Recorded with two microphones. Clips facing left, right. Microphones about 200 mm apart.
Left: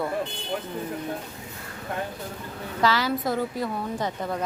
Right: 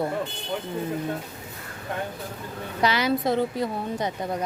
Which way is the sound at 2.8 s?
20° right (ahead or behind).